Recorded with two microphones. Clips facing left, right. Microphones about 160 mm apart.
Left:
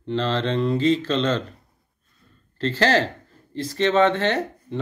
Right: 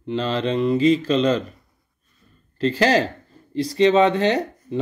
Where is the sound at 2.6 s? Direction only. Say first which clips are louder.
Right 2 dB; 10° right (ahead or behind).